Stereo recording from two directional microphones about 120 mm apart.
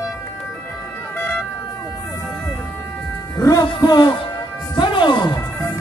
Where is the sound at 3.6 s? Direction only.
40° left (ahead or behind).